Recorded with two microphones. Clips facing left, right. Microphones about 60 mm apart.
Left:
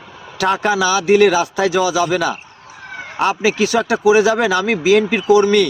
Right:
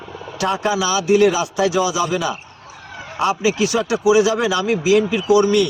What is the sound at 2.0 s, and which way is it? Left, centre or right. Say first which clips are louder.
Speech: left 3 dB; left.